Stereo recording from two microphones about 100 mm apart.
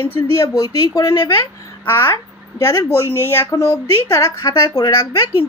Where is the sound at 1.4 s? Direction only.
20° left (ahead or behind).